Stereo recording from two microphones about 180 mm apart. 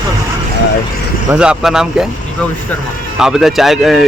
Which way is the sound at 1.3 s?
5° right (ahead or behind).